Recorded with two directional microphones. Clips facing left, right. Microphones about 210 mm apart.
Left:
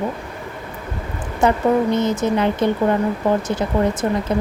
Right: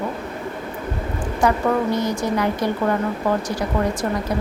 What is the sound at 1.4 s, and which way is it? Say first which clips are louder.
A woman's voice: left 3 dB; 25° left (ahead or behind).